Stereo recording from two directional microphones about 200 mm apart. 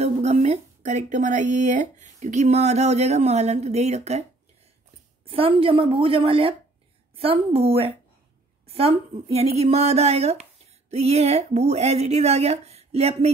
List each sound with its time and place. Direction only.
0.0 s speech: 35° right (ahead or behind)
5.2 s a woman's voice: 30° right (ahead or behind)